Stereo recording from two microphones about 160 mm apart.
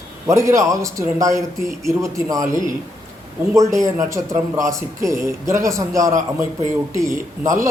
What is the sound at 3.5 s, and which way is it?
A man's voice, 20° right (ahead or behind).